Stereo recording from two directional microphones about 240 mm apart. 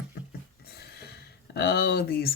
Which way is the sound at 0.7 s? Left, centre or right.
Left.